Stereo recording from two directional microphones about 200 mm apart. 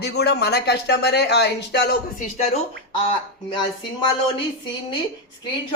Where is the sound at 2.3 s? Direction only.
35° left (ahead or behind).